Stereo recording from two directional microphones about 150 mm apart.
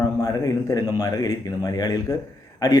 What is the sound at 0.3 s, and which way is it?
Speech, 25° left (ahead or behind).